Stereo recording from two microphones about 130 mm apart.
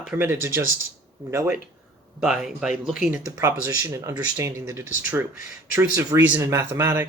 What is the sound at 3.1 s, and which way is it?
Speech, 20° right (ahead or behind).